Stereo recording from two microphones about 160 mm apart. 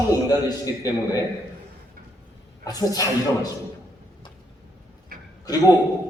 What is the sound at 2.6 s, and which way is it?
Speech, 25° left (ahead or behind).